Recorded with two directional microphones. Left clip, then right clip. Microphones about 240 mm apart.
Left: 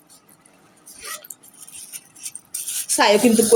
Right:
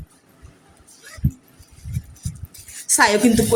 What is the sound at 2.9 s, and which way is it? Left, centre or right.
Speech, right.